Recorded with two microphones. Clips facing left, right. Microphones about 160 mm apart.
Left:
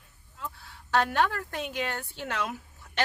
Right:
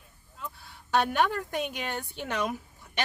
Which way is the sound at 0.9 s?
15° right (ahead or behind).